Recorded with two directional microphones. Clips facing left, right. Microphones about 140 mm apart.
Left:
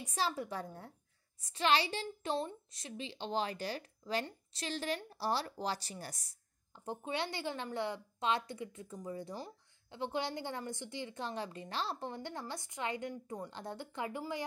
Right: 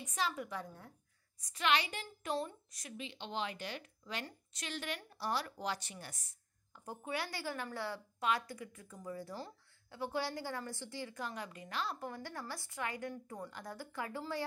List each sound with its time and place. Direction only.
0.0 s a woman's voice: 30° left (ahead or behind)
6.8 s a woman's voice: 25° left (ahead or behind)